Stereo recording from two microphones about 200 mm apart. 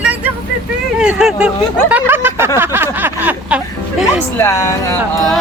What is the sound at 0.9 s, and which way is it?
Speech, 5° right (ahead or behind).